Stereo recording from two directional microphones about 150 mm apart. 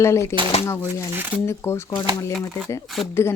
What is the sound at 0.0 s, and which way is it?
Speech, 20° left (ahead or behind).